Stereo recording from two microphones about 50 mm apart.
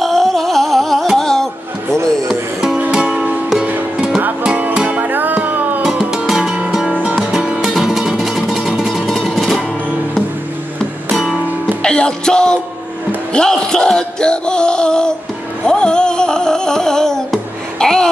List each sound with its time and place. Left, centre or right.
0.0 s music: centre
1.1 s a sound: centre
2.2 s music: centre
4.4 s music: right
5.9 s music: centre
8.0 s music: centre
8.3 s music: centre
11.1 s music: centre
11.6 s music: centre